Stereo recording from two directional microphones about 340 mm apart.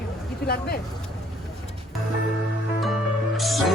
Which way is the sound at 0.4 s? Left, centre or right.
Left.